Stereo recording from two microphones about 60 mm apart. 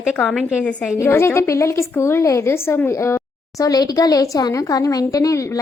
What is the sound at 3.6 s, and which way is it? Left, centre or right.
Speech, left.